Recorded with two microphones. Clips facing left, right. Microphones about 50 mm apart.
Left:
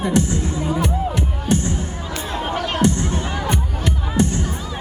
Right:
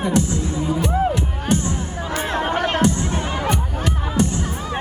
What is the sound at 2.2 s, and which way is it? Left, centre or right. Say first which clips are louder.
Chatter: right 3 dB; right.